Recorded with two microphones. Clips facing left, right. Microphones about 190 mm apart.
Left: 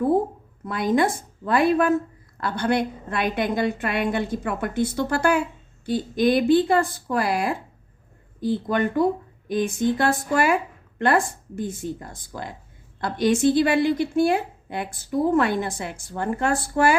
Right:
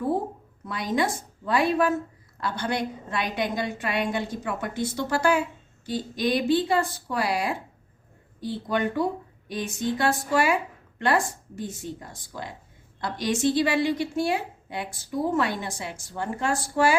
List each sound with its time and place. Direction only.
0.6 s a woman's voice: 55° left (ahead or behind)